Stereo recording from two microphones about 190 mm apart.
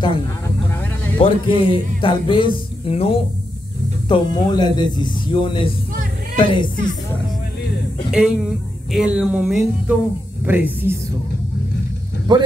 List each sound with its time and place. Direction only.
1.1 s speech: 30° left (ahead or behind)
8.1 s speech: 5° right (ahead or behind)
12.3 s speech: 20° right (ahead or behind)